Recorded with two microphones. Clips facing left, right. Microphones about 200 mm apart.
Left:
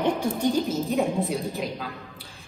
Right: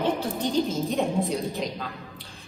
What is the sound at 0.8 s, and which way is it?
A woman's voice, centre (ahead or behind).